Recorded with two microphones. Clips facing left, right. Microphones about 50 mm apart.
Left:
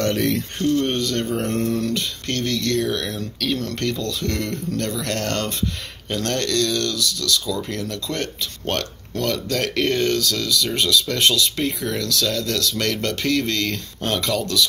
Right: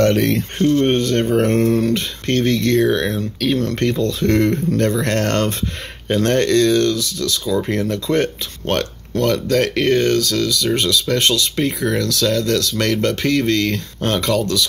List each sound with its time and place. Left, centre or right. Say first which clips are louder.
0.0 s speech: right 6 dB; right
0.6 s speech: right 6 dB; right
1.8 s speech: right 5 dB; right
8.6 s speech: right 6 dB; centre